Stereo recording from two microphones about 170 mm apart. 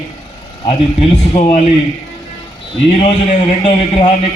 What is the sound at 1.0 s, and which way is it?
Speech, 40° left (ahead or behind).